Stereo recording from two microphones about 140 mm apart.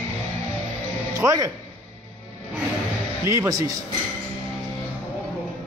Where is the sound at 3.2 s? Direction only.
20° right (ahead or behind).